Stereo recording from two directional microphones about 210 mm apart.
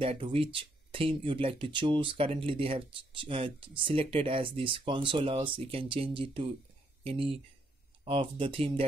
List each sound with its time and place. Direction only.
0.0 s speech: 25° right (ahead or behind)